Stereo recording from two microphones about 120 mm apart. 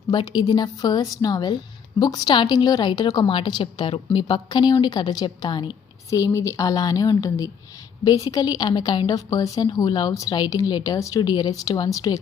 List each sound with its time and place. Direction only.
0.1 s a woman's voice: 40° left (ahead or behind)
6.1 s a woman's voice: 25° left (ahead or behind)